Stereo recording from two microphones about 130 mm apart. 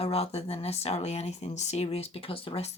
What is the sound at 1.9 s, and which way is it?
Speech, 45° left (ahead or behind).